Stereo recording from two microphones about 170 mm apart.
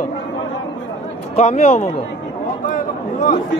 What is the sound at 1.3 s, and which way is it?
Speech, 40° left (ahead or behind).